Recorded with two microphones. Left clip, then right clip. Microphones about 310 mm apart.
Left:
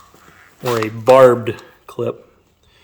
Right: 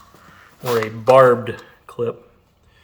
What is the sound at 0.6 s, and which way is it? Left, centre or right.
Speech, left.